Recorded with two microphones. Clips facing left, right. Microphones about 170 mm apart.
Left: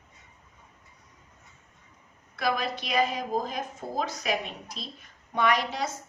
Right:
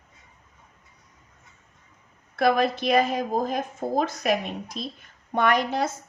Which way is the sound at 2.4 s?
55° right (ahead or behind).